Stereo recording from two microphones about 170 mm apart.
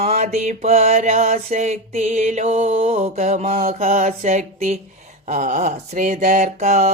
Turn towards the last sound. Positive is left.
turn(degrees=-40)  # may be behind; listen again after turning